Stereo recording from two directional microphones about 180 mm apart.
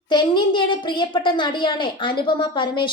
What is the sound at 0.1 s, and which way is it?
A woman's voice, 25° left (ahead or behind).